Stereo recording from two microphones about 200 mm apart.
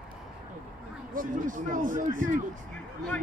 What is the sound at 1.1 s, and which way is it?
Speech, 40° right (ahead or behind).